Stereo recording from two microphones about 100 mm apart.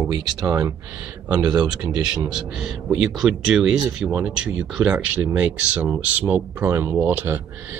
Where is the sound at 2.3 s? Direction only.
5° right (ahead or behind).